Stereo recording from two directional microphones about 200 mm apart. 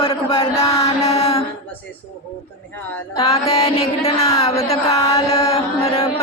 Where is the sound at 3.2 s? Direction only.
30° left (ahead or behind).